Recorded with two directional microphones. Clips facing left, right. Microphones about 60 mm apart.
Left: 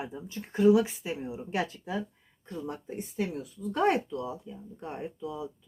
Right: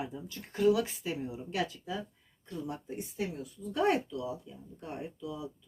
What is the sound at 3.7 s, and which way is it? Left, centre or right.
Speech, left.